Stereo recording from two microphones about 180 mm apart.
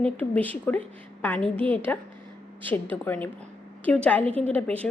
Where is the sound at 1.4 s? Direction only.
30° right (ahead or behind).